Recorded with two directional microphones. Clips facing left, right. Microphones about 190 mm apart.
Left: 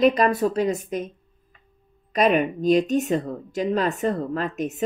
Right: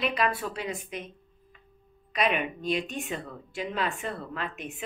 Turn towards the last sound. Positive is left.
turn(degrees=40)  # may be behind; listen again after turning